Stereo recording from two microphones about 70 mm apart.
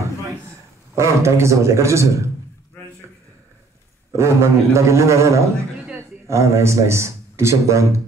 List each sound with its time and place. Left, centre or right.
0.9 s a man's voice: right
4.1 s a man's voice: right